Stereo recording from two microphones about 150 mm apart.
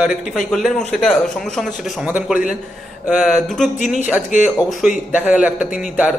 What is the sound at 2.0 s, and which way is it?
Speech, 10° right (ahead or behind).